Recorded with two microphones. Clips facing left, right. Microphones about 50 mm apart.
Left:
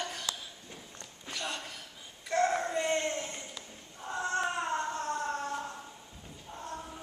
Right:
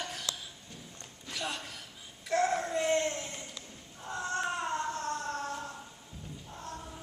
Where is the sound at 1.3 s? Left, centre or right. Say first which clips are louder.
Even; centre.